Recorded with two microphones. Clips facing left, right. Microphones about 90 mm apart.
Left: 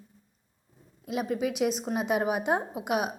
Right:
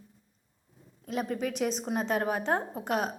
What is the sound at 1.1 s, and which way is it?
A woman's voice, 5° left (ahead or behind).